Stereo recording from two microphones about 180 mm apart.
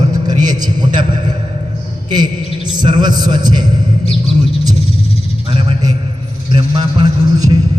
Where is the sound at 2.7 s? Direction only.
25° right (ahead or behind).